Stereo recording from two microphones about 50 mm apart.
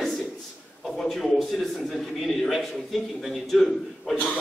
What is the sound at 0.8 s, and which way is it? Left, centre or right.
A man's voice, centre.